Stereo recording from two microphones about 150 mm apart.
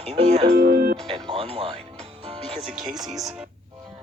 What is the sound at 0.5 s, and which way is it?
Speech, 80° right.